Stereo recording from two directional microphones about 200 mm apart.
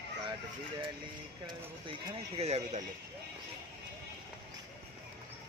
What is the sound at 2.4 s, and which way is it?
Speech, 30° right (ahead or behind).